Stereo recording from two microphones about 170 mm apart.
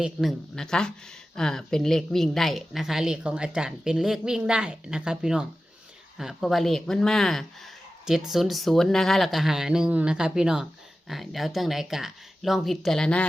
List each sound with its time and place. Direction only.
0.0 s a woman's voice: centre (ahead or behind)